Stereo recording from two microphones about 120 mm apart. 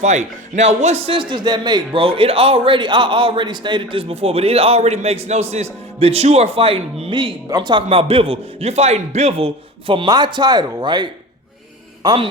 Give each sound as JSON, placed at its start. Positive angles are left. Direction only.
{"t": 0.0, "sound": "a man's voice", "side_deg": -75}
{"t": 12.0, "sound": "a man's voice", "side_deg": -50}